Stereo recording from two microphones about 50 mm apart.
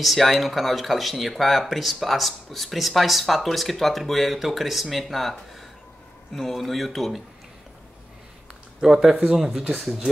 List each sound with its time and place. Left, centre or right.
0.0 s speech: centre
8.8 s speech: centre